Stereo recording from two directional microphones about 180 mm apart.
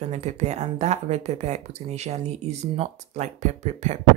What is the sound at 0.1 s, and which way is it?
Speech, 40° right (ahead or behind).